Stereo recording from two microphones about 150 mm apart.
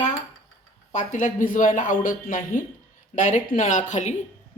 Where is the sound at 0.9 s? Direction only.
60° left (ahead or behind).